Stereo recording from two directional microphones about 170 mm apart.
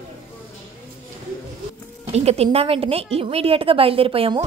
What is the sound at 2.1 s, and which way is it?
A woman's voice, 40° right (ahead or behind).